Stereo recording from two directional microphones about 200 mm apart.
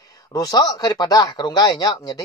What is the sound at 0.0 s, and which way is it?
Speech, 20° left (ahead or behind).